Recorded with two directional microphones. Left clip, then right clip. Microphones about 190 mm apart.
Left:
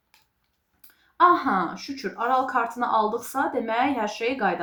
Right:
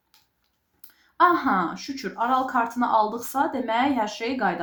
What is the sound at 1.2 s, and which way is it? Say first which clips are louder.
Speech: left 1 dB; 40° right (ahead or behind).